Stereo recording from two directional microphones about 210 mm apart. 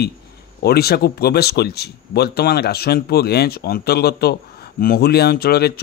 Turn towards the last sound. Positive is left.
turn(degrees=50)  # may be behind; listen again after turning